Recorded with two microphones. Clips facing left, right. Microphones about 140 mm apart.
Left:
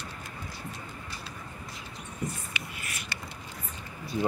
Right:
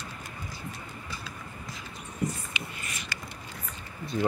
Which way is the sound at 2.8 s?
5° left (ahead or behind).